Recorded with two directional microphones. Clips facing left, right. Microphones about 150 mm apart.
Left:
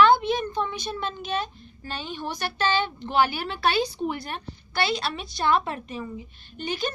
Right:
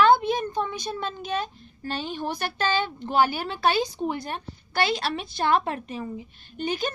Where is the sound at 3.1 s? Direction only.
40° right (ahead or behind).